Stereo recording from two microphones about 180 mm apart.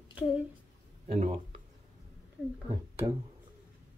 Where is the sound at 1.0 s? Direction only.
35° right (ahead or behind).